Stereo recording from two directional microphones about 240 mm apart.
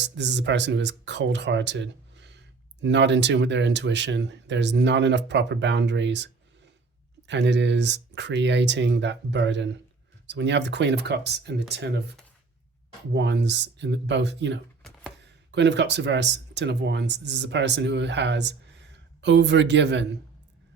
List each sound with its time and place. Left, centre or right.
0.0 s speech: right
13.1 s speech: right
14.8 s computer keyboard: centre
15.5 s speech: right